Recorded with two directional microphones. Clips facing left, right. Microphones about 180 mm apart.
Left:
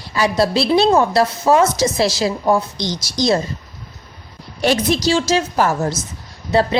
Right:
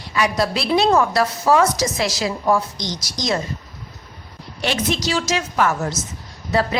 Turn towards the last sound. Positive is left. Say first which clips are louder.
# left 4 dB
turn(degrees=30)  # may be behind; listen again after turning